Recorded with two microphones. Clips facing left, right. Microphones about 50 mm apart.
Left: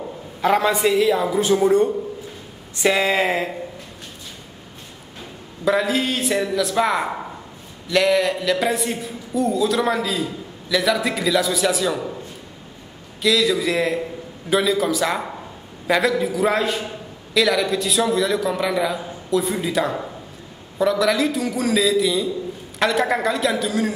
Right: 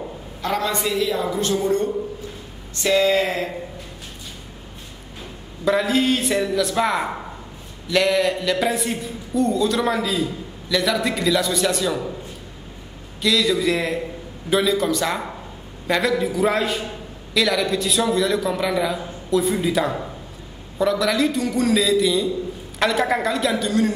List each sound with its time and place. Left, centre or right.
0.4 s a man's voice: centre
5.7 s a man's voice: centre
13.2 s a man's voice: centre